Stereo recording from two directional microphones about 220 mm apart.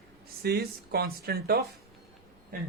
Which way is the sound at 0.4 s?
45° right (ahead or behind).